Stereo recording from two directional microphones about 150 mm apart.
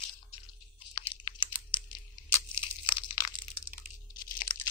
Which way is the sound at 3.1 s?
30° left (ahead or behind).